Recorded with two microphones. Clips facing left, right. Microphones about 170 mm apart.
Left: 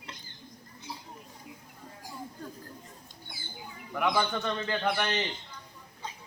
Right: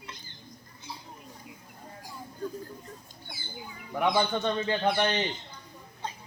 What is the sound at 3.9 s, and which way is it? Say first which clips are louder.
Speech: right 2 dB; 30° right (ahead or behind).